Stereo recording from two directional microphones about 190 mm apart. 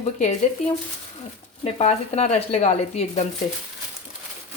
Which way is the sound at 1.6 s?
35° left (ahead or behind).